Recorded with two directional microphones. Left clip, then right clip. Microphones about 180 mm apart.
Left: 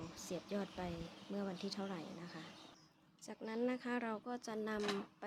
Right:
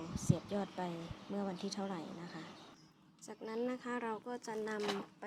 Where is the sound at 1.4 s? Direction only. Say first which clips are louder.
Right 3 dB; centre (ahead or behind).